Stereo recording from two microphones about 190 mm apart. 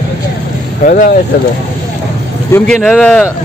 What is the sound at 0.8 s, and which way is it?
Speech, 45° left (ahead or behind).